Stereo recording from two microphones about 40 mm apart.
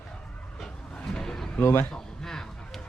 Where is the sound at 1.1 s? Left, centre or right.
Centre.